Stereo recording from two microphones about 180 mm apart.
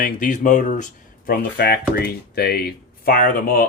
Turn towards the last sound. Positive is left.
turn(degrees=50)  # may be behind; listen again after turning